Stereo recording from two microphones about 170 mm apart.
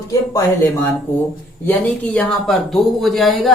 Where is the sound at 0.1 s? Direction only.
20° left (ahead or behind).